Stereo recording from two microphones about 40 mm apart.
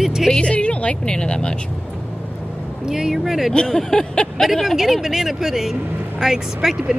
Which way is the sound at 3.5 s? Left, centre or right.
Centre.